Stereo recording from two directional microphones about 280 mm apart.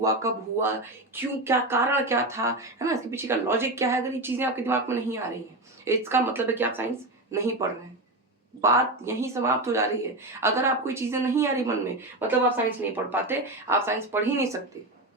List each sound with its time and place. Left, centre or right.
0.0 s speech: centre
8.6 s speech: centre